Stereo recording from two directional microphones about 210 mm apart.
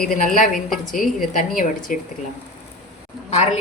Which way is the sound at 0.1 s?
40° left (ahead or behind).